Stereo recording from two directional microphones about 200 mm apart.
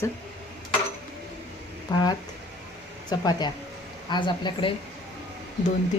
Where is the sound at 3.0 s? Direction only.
20° left (ahead or behind).